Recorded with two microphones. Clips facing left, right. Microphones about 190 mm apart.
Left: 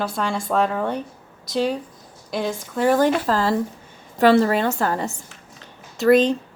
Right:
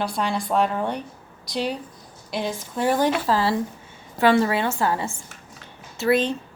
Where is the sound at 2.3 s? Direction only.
50° left (ahead or behind).